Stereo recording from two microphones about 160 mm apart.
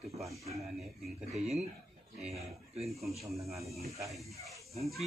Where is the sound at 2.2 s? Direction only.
40° right (ahead or behind).